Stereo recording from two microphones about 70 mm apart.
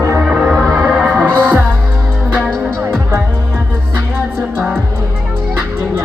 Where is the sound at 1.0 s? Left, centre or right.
Right.